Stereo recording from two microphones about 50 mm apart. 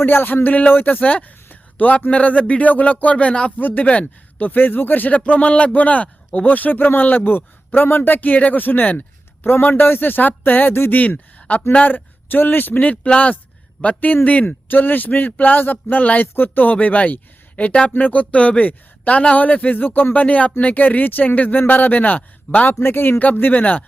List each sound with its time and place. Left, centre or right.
0.0 s speech: left
0.4 s a man's voice: left
3.6 s speech: left
11.3 s a sound: left
11.7 s speech: left
12.9 s a man's voice: left
16.2 s speech: left
16.7 s a man's voice: left
22.8 s speech: left
23.1 s speech: left